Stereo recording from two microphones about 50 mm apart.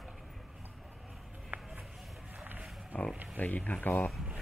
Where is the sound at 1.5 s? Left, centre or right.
Right.